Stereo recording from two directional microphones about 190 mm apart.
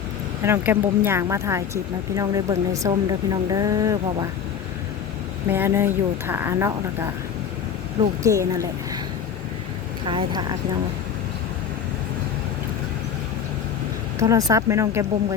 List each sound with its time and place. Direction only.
0.4 s speech: 10° right (ahead or behind)
5.5 s speech: 10° right (ahead or behind)
8.2 s speech: 15° right (ahead or behind)
10.1 s speech: 25° right (ahead or behind)
14.2 s speech: 20° right (ahead or behind)